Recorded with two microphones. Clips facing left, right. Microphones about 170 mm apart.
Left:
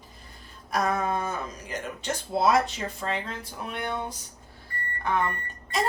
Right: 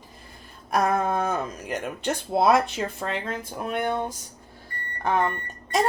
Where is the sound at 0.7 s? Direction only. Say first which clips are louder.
Right 3 dB; 55° right (ahead or behind).